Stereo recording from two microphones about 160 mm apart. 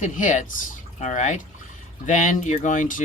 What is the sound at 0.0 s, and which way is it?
Speech, 50° left (ahead or behind).